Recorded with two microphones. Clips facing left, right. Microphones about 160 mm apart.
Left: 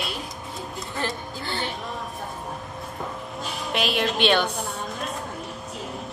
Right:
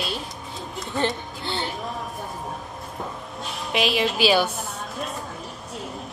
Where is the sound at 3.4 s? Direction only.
Centre (ahead or behind).